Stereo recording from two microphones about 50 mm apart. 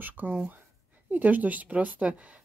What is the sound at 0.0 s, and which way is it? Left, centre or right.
Speech, right.